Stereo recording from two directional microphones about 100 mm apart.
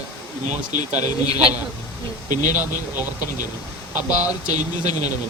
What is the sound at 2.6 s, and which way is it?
Speech, 20° right (ahead or behind).